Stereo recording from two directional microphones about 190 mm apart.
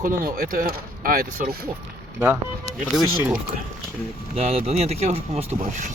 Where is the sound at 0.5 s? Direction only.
50° right (ahead or behind).